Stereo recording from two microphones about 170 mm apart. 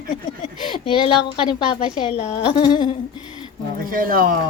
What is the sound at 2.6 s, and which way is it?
Speech, 25° left (ahead or behind).